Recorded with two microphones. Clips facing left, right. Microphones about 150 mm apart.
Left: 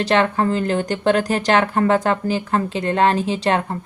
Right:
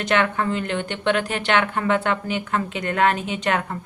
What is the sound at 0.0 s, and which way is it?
Speech, 35° left (ahead or behind).